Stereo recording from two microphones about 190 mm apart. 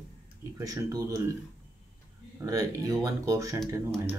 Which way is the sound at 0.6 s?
20° right (ahead or behind).